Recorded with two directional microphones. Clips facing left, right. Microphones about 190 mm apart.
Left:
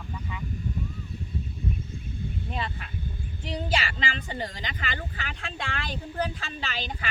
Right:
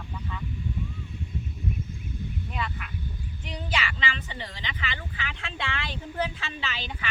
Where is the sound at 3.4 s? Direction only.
35° left (ahead or behind).